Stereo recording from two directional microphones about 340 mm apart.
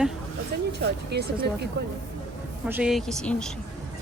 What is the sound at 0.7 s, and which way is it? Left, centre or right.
Speech, right.